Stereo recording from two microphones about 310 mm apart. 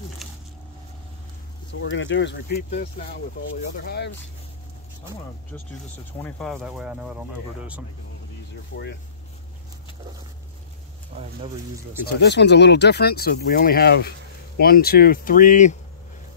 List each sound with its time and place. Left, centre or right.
1.7 s speech: left
6.2 s speech: centre
12.0 s speech: left